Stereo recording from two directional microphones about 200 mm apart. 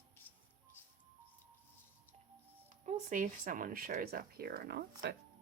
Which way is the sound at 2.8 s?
40° right (ahead or behind).